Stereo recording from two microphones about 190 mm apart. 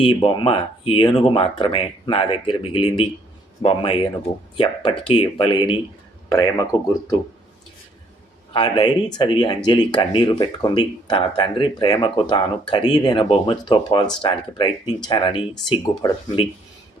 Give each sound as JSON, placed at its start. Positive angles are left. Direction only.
{"t": 0.0, "sound": "speech", "side_deg": 25}
{"t": 8.5, "sound": "speech", "side_deg": 25}